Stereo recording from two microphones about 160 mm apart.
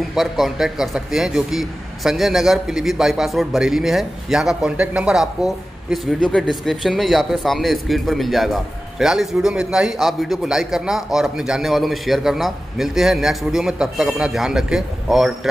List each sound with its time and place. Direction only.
0.1 s a man's voice: centre (ahead or behind)